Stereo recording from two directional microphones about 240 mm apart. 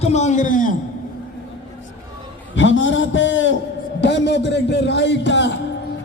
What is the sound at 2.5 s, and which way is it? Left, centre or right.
A man's voice, left.